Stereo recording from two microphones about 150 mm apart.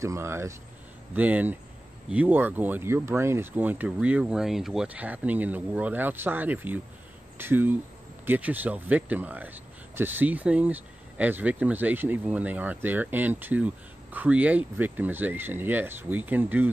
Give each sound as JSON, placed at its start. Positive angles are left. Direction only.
{"t": 0.0, "sound": "speech", "side_deg": -20}